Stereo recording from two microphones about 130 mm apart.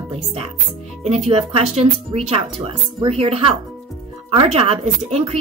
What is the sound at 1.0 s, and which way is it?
Speech, 55° right (ahead or behind).